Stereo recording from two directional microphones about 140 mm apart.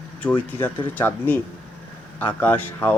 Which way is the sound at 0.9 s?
15° left (ahead or behind).